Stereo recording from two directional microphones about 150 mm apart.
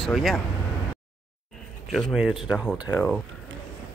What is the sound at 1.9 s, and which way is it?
Speech, centre (ahead or behind).